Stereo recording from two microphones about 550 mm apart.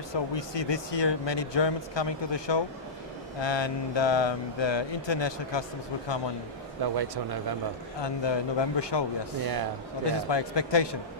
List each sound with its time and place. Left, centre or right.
0.1 s speech: left
6.8 s speech: right
8.0 s speech: left
9.4 s speech: right
10.0 s speech: left